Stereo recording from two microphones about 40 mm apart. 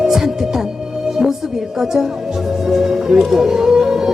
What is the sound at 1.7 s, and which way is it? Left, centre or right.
Speech, centre.